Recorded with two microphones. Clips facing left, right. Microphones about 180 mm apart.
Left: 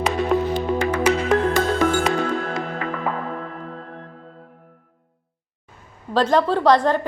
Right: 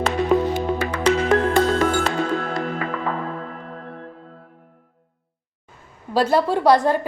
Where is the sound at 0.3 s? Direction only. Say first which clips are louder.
Right 3 dB; centre (ahead or behind).